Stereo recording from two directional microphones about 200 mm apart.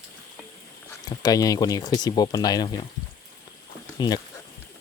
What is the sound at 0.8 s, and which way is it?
Speech, 20° left (ahead or behind).